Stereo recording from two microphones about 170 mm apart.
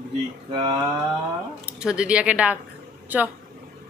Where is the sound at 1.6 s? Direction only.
5° right (ahead or behind).